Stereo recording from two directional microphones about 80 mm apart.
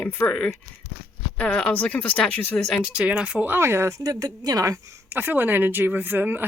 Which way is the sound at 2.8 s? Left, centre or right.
Centre.